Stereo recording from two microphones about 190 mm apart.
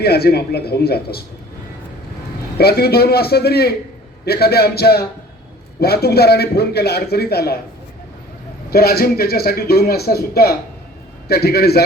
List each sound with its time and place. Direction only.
0.0 s a man's voice: 55° left (ahead or behind)
2.6 s a man's voice: 55° left (ahead or behind)
8.7 s a man's voice: 55° left (ahead or behind)